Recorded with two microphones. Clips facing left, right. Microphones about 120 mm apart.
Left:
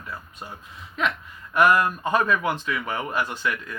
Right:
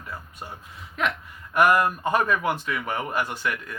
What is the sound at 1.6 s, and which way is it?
Speech, 45° right (ahead or behind).